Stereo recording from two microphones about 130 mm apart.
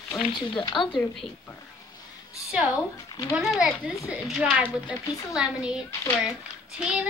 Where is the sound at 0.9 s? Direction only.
Centre (ahead or behind).